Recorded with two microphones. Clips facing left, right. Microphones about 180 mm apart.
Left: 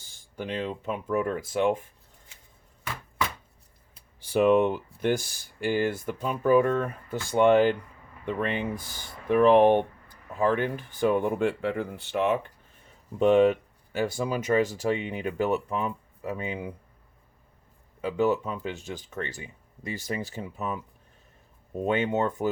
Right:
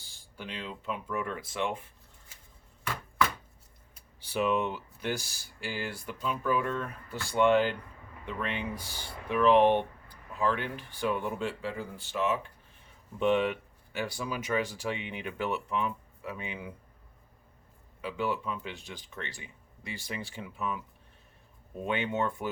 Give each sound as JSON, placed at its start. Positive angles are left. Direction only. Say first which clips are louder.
{"t": 0.0, "sound": "speech", "louder": "left 8 dB", "side_deg": 45}
{"t": 4.3, "sound": "speech", "louder": "left 8 dB", "side_deg": 50}
{"t": 13.1, "sound": "speech", "louder": "left 7 dB", "side_deg": 45}
{"t": 18.0, "sound": "speech", "louder": "left 8 dB", "side_deg": 45}
{"t": 21.8, "sound": "speech", "louder": "left 5 dB", "side_deg": 40}